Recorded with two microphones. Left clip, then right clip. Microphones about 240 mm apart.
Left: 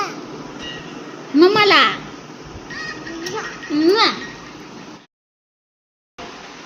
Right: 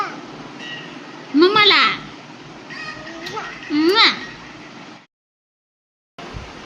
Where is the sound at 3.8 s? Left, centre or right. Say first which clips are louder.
Right 1 dB; centre.